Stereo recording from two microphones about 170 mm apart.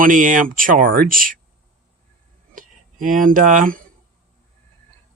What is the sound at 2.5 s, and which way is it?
Speech, 50° right (ahead or behind).